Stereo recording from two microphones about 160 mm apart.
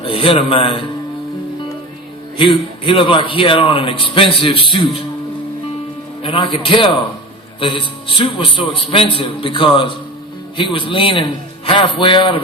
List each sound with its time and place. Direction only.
0.0 s a man's voice: 35° left (ahead or behind)
2.4 s a man's voice: 30° left (ahead or behind)
6.2 s a man's voice: 35° left (ahead or behind)